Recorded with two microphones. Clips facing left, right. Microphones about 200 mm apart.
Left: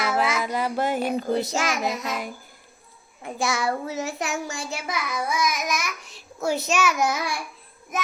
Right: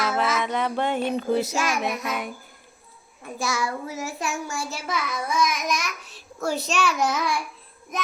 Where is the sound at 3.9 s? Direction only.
20° left (ahead or behind).